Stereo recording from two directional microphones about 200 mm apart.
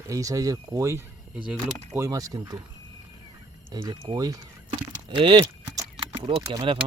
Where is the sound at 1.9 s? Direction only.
15° right (ahead or behind).